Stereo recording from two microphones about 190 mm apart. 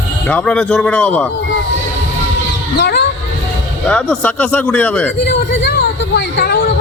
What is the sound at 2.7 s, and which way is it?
Speech, 60° left (ahead or behind).